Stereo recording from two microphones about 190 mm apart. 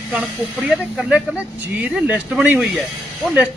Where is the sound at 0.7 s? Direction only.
Centre (ahead or behind).